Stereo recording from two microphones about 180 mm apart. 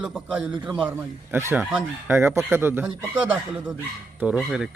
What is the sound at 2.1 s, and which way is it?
Speech, 15° right (ahead or behind).